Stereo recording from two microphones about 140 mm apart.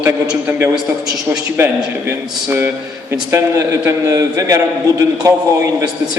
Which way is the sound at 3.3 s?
20° right (ahead or behind).